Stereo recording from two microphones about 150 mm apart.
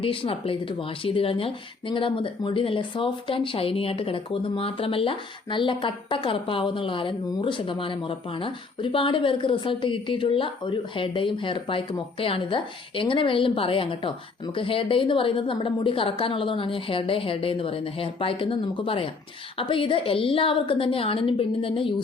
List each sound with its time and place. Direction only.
0.0 s speech: 35° left (ahead or behind)